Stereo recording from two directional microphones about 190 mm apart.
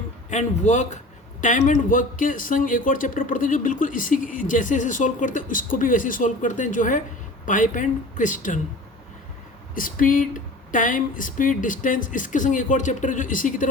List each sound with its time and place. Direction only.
0.3 s speech: 40° left (ahead or behind)
9.7 s speech: 45° left (ahead or behind)